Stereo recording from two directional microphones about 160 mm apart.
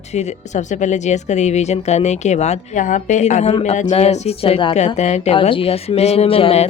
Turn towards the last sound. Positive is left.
turn(degrees=40)  # may be behind; listen again after turning